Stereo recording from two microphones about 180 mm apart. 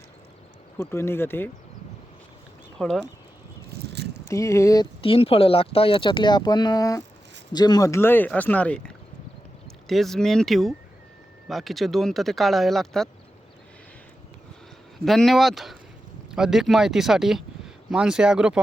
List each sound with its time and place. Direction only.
0.8 s speech: 15° left (ahead or behind)
2.7 s speech: centre (ahead or behind)
3.7 s vehicle: 65° right (ahead or behind)
4.3 s speech: 15° left (ahead or behind)
4.9 s speech: 30° left (ahead or behind); by 13.1 s centre (ahead or behind)
14.9 s speech: centre (ahead or behind)